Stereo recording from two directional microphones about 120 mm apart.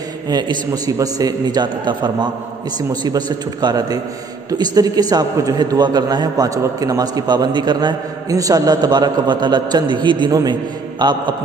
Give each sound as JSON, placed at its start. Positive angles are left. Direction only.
{"t": 0.3, "sound": "a man's voice", "side_deg": -35}